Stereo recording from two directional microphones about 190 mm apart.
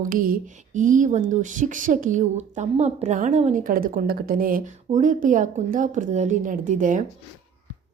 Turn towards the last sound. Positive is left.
turn(degrees=-40)  # may be behind; listen again after turning